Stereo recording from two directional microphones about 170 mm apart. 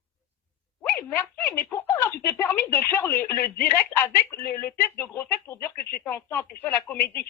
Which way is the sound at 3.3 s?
60° left (ahead or behind).